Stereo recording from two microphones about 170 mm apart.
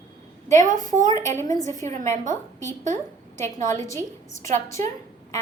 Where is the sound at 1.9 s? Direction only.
45° right (ahead or behind).